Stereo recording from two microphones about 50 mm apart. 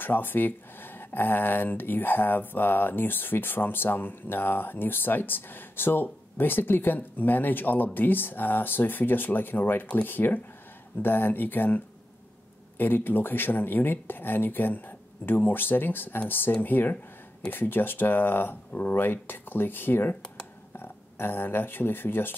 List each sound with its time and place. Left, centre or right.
0.0 s speech: left